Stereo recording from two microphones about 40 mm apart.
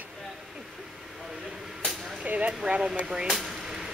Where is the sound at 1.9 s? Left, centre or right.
Centre.